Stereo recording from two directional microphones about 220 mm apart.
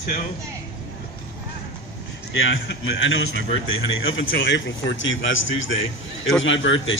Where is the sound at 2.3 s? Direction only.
55° left (ahead or behind).